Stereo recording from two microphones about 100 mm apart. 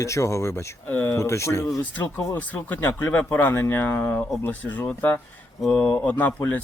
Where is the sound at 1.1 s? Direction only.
30° left (ahead or behind).